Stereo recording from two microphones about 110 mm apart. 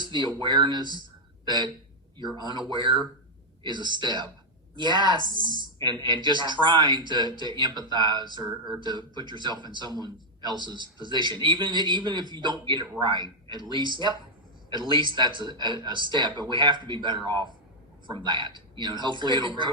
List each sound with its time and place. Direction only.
0.0 s speech: 40° right (ahead or behind)